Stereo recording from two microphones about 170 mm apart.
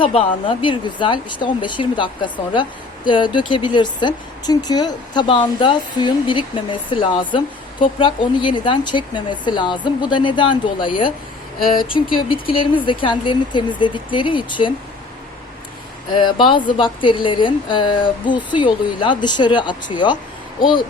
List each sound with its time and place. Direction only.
0.0 s speech: 30° left (ahead or behind)
11.6 s speech: 55° left (ahead or behind)
12.1 s speech: 30° left (ahead or behind)
16.1 s speech: 30° left (ahead or behind)